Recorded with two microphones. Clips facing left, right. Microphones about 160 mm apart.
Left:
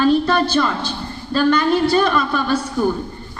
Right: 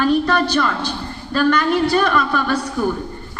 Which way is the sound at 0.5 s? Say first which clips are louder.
Even; 25° left (ahead or behind).